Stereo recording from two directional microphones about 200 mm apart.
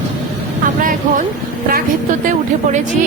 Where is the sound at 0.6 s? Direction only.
40° right (ahead or behind).